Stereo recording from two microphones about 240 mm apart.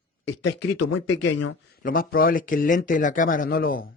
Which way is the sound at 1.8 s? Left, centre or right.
Left.